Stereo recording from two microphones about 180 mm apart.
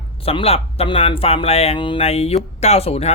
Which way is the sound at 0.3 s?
35° left (ahead or behind).